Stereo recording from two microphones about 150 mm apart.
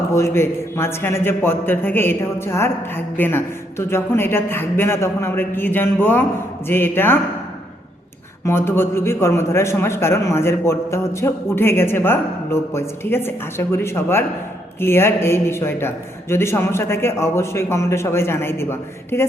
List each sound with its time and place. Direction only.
0.1 s a man's voice: 20° left (ahead or behind)
8.4 s a man's voice: 15° left (ahead or behind)